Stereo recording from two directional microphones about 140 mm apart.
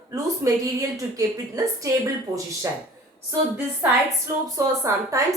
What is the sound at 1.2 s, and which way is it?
Speech, 25° right (ahead or behind).